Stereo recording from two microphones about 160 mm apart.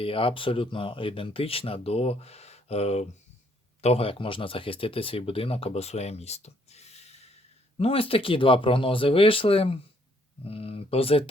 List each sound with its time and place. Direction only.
0.0 s speech: 35° left (ahead or behind)